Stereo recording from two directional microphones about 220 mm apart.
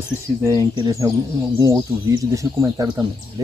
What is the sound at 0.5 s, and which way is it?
Speech, 15° right (ahead or behind).